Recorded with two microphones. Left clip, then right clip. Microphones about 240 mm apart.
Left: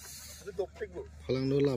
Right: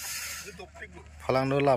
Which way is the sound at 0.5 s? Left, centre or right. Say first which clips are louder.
Left 7 dB; left.